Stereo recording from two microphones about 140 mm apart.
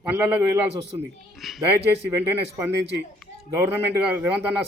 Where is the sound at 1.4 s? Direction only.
Centre (ahead or behind).